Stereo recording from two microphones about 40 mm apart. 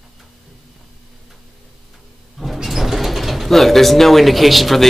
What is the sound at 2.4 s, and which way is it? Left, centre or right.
Speech, centre.